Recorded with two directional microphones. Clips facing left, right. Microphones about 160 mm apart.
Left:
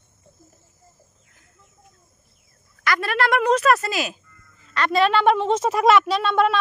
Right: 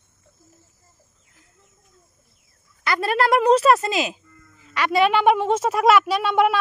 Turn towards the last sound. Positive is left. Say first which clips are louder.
# right 1 dB
turn(degrees=-10)  # may be behind; listen again after turning